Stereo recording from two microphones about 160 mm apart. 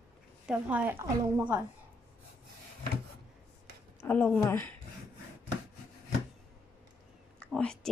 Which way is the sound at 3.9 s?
10° left (ahead or behind).